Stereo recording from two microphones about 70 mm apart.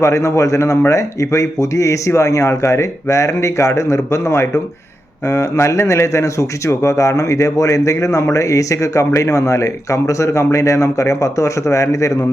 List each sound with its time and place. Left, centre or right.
0.0 s a man's voice: left